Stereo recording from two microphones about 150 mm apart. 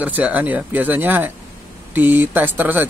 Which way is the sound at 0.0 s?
10° right (ahead or behind).